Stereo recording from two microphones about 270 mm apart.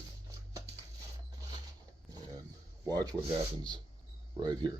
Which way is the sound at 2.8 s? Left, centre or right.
Centre.